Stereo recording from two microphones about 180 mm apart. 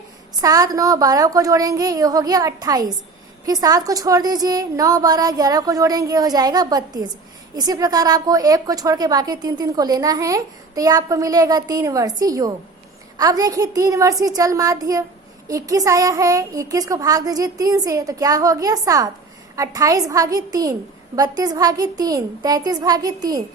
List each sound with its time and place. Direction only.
0.4 s a woman's voice: 20° right (ahead or behind)